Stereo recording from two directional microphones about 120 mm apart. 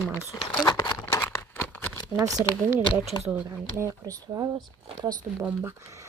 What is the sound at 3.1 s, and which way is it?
Speech, 30° left (ahead or behind).